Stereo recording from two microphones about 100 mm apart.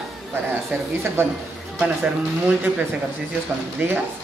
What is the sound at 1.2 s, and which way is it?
Speech, 25° right (ahead or behind).